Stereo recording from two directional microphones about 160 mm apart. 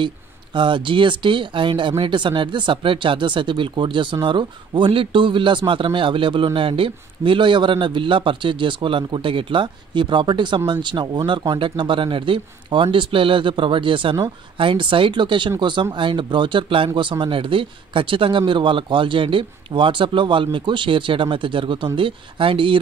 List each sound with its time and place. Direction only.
0.0 s speech: 30° right (ahead or behind)